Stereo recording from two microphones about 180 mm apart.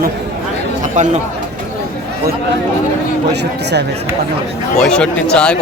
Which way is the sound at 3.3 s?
70° right (ahead or behind).